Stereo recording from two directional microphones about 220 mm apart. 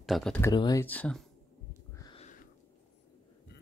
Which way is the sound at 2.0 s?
25° left (ahead or behind).